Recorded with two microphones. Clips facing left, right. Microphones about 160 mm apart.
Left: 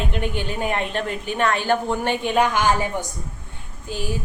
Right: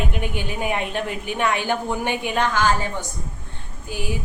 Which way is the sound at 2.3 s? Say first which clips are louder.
Left 1 dB; 15° left (ahead or behind).